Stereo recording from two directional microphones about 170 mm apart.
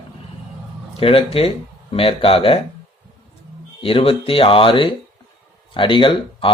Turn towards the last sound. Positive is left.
turn(degrees=30)  # may be behind; listen again after turning